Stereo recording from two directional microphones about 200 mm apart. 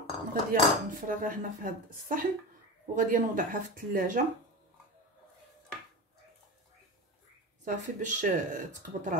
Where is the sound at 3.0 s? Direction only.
40° right (ahead or behind).